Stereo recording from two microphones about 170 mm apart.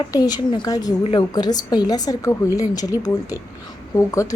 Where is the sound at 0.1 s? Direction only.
25° left (ahead or behind).